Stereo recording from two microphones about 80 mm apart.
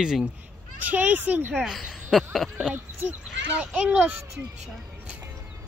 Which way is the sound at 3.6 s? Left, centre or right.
Centre.